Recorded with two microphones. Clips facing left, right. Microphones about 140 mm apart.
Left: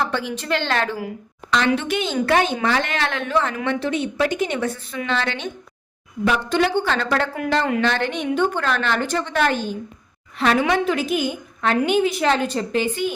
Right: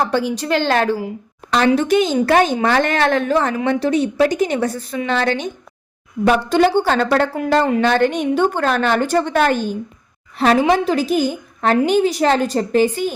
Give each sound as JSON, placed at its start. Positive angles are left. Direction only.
{"t": 0.0, "sound": "a woman's voice", "side_deg": -40}
{"t": 7.8, "sound": "a woman's voice", "side_deg": -45}